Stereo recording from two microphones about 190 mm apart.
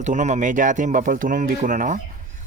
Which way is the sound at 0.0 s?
40° right (ahead or behind).